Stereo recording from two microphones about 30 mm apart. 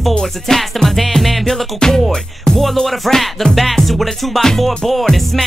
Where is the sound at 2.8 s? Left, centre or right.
Centre.